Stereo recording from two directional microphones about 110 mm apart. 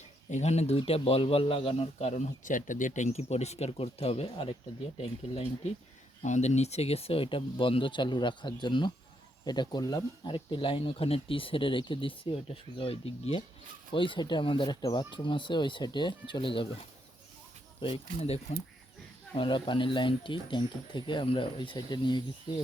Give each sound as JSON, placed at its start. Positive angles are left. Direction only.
{"t": 0.3, "sound": "speech", "side_deg": 90}
{"t": 0.8, "sound": "speech", "side_deg": 60}
{"t": 2.9, "sound": "speech", "side_deg": 85}
{"t": 6.2, "sound": "speech", "side_deg": 90}
{"t": 13.9, "sound": "speech", "side_deg": 50}
{"t": 17.7, "sound": "speech", "side_deg": 60}
{"t": 19.3, "sound": "speech", "side_deg": 45}